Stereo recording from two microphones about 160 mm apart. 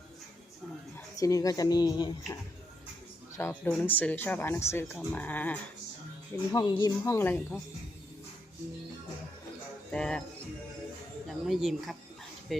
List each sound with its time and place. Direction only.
1.1 s speech: 20° left (ahead or behind)
3.3 s speech: 15° left (ahead or behind)
6.5 s speech: 25° left (ahead or behind)
9.9 s speech: 5° left (ahead or behind)
11.3 s speech: centre (ahead or behind)